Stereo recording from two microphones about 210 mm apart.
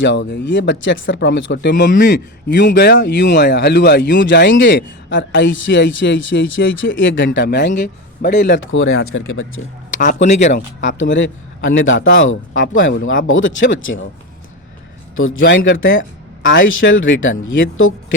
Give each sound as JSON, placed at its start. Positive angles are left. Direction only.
{"t": 0.0, "sound": "speech", "side_deg": 60}
{"t": 10.0, "sound": "speech", "side_deg": 35}
{"t": 10.8, "sound": "speech", "side_deg": 60}
{"t": 15.4, "sound": "speech", "side_deg": 60}